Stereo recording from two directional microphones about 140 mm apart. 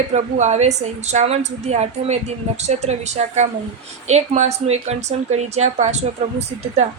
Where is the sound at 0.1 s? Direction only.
55° right (ahead or behind).